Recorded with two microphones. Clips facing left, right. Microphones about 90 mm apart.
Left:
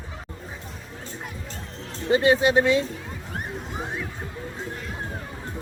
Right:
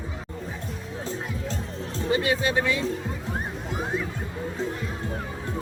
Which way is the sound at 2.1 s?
25° left (ahead or behind).